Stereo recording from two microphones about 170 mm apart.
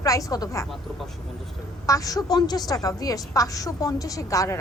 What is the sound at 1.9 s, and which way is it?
A woman's voice, 20° left (ahead or behind).